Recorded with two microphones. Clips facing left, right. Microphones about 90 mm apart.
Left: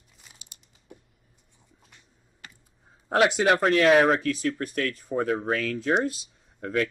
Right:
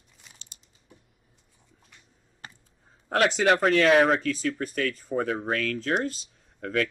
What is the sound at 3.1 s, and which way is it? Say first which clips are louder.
Speech: left 1 dB; 10° left (ahead or behind).